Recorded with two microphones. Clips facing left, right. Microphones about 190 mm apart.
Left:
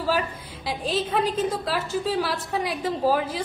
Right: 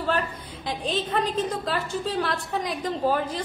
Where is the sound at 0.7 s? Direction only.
5° left (ahead or behind).